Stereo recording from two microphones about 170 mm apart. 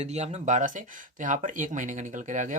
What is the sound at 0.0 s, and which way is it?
Speech, 40° right (ahead or behind).